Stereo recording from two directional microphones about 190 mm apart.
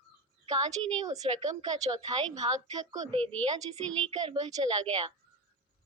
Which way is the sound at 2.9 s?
20° right (ahead or behind).